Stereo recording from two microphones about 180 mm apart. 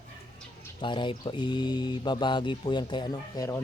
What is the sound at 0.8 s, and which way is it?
Speech, 25° left (ahead or behind).